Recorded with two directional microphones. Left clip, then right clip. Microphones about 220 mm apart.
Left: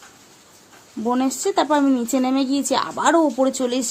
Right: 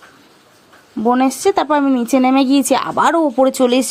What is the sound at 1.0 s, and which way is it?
Speech, 25° right (ahead or behind).